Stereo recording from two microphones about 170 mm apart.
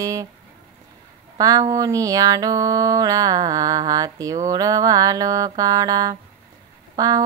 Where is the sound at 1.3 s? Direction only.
20° right (ahead or behind).